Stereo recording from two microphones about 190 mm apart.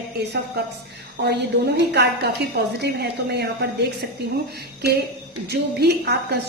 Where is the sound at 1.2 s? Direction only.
60° right (ahead or behind).